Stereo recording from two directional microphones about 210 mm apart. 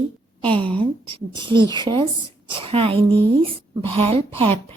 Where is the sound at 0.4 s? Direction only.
25° right (ahead or behind).